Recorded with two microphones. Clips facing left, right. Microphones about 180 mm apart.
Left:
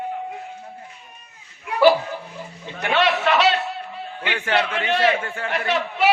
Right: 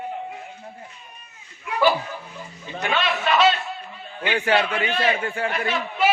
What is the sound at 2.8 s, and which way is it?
Speech, 70° left (ahead or behind).